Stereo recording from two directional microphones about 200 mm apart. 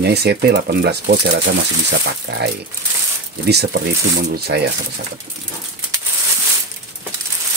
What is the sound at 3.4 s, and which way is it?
Speech, 55° right (ahead or behind).